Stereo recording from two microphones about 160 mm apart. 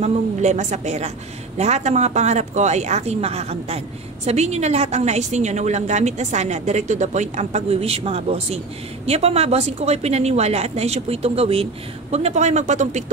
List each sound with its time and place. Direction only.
0.0 s a woman's voice: 45° right (ahead or behind)